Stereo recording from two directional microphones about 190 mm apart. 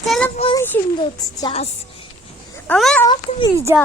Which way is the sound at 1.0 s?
30° left (ahead or behind).